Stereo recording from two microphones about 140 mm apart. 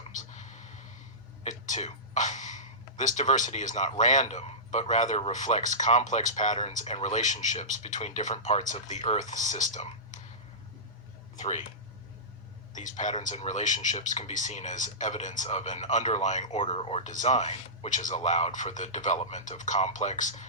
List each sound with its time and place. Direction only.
0.2 s a sound: 60° left (ahead or behind)
1.5 s speech: 60° left (ahead or behind)
6.7 s speech: 50° left (ahead or behind)
11.3 s speech: 60° left (ahead or behind)
12.7 s speech: 60° left (ahead or behind); by 17.0 s 45° left (ahead or behind)
17.1 s speech: 60° left (ahead or behind)